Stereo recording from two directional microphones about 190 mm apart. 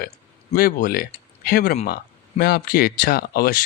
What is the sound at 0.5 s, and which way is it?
Speech, 50° left (ahead or behind).